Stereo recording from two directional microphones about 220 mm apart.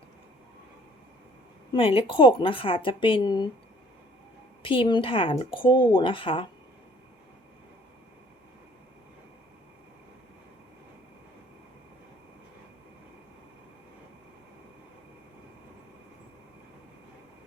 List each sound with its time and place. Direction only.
1.7 s speech: 25° left (ahead or behind)
4.6 s speech: 25° left (ahead or behind)